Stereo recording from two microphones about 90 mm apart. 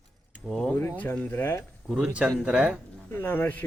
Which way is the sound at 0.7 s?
25° left (ahead or behind).